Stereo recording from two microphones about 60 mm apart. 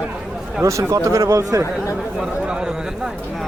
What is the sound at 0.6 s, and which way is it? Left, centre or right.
Speech, right.